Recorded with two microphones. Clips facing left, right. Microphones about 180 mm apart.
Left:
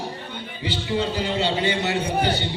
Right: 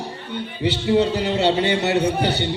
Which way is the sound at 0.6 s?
65° right (ahead or behind).